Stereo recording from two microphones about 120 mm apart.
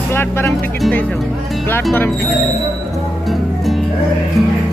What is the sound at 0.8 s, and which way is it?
Speech, 10° left (ahead or behind).